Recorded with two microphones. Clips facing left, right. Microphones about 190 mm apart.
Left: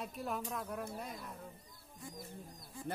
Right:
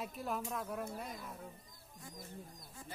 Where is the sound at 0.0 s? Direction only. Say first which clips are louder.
Even; centre (ahead or behind).